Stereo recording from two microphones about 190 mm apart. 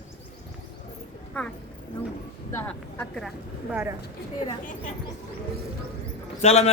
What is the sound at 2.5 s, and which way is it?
Speech, 10° left (ahead or behind).